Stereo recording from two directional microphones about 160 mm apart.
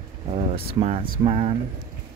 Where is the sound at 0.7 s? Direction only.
35° right (ahead or behind).